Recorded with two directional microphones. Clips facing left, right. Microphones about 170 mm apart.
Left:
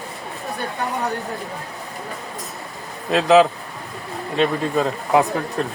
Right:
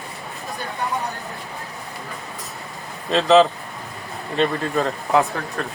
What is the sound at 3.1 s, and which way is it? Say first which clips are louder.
Speech: left 1 dB; 5° left (ahead or behind).